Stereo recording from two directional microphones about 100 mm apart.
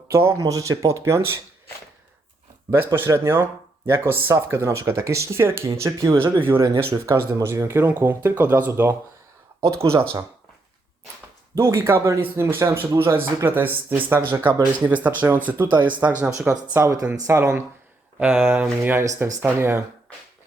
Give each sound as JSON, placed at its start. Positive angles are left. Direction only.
{"t": 0.1, "sound": "speech", "side_deg": -30}
{"t": 2.6, "sound": "speech", "side_deg": -25}
{"t": 11.5, "sound": "speech", "side_deg": -25}
{"t": 16.7, "sound": "speech", "side_deg": -30}